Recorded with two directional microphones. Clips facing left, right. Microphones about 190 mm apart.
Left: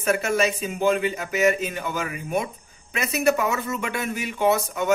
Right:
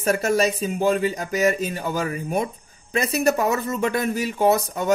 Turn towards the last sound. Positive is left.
turn(degrees=-35)  # may be behind; listen again after turning